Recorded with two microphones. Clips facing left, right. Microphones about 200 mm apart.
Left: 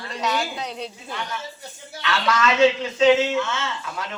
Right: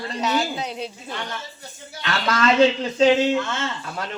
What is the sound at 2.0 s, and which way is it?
Speech, 40° right (ahead or behind).